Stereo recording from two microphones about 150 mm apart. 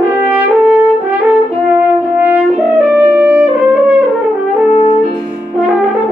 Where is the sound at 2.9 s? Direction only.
10° right (ahead or behind).